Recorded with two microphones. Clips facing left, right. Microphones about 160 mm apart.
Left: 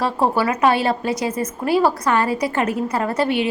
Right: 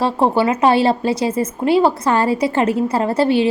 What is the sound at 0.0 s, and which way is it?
Speech, 25° right (ahead or behind).